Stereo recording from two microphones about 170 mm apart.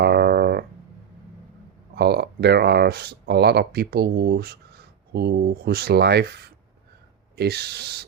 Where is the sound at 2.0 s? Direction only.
70° right (ahead or behind).